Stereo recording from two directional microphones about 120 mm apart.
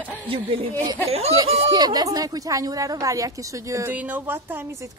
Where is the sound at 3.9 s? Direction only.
15° right (ahead or behind).